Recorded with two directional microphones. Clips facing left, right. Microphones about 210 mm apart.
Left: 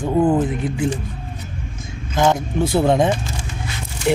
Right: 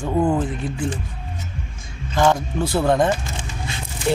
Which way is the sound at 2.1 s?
20° left (ahead or behind).